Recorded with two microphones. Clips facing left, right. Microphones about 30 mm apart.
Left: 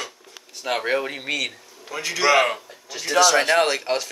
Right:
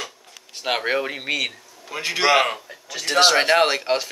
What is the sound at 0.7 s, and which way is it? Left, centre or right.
Speech, centre.